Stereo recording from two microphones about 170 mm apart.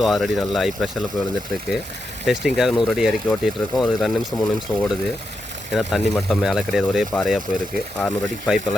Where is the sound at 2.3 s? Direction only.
5° right (ahead or behind).